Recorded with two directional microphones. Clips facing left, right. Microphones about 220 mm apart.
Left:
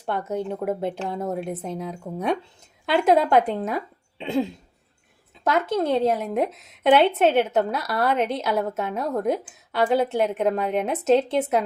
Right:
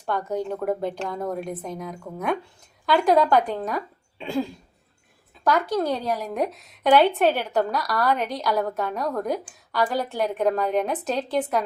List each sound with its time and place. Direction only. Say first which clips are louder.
0.0 s a woman's voice: even; 25° left (ahead or behind)